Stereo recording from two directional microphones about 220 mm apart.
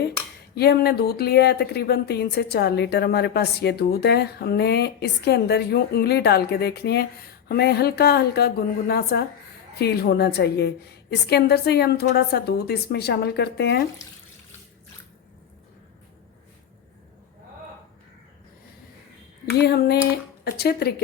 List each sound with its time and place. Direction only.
0.5 s speech: 45° left (ahead or behind)
19.5 s speech: 50° left (ahead or behind)